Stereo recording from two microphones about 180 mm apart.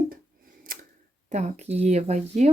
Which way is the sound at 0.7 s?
55° right (ahead or behind).